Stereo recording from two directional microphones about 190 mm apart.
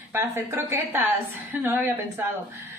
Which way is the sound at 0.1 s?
10° right (ahead or behind).